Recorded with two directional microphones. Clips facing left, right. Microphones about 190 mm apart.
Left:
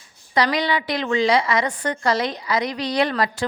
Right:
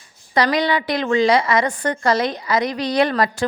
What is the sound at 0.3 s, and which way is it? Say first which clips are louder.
A woman's voice: right 2 dB; 50° right (ahead or behind).